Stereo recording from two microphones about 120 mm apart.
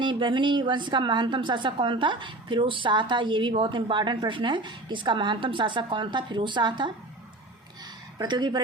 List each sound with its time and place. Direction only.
0.0 s a woman's voice: 40° right (ahead or behind)
8.2 s a woman's voice: 40° right (ahead or behind)